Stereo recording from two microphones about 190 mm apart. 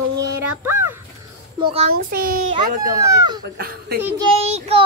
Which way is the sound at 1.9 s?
50° right (ahead or behind).